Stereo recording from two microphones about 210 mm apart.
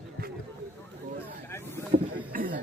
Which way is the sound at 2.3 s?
40° right (ahead or behind).